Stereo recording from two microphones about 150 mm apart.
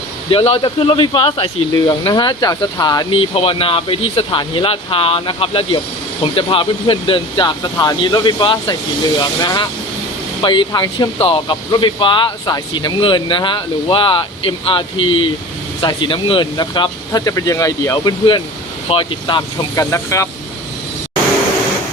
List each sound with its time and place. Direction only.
0.3 s speech: 40° left (ahead or behind)
19.7 s speech: 20° left (ahead or behind)